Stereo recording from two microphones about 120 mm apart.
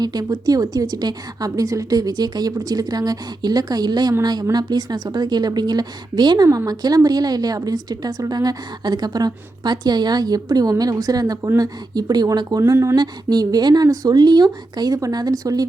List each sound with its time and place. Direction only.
0.0 s a woman's voice: 35° right (ahead or behind)
13.0 s a woman's voice: 35° right (ahead or behind)